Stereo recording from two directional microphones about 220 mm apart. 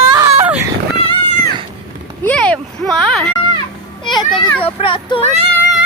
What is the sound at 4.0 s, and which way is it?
A child's voice, 20° left (ahead or behind).